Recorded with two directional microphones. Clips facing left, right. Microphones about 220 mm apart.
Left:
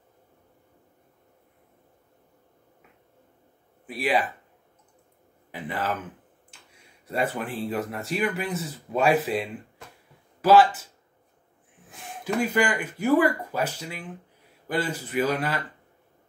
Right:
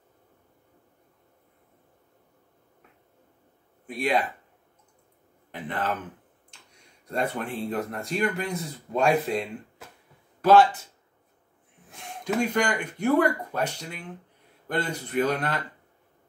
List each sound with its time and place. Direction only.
3.8 s speech: 5° left (ahead or behind)
5.5 s speech: 5° left (ahead or behind)
11.9 s speech: 5° left (ahead or behind)